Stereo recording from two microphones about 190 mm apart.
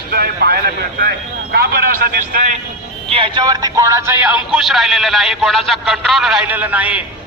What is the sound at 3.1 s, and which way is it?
Speech, 25° right (ahead or behind).